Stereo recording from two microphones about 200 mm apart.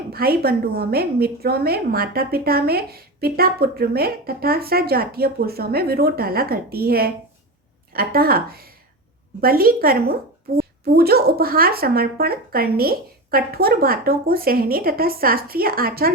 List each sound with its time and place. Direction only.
0.1 s a woman's voice: 50° right (ahead or behind)